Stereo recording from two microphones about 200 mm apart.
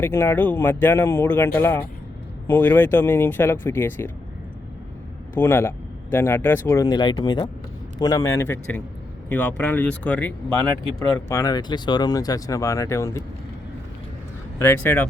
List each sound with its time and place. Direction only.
0.0 s speech: 10° left (ahead or behind)
5.3 s speech: 10° left (ahead or behind)
14.6 s speech: 10° left (ahead or behind)